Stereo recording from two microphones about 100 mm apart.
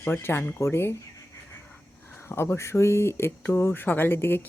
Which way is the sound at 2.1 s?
25° left (ahead or behind).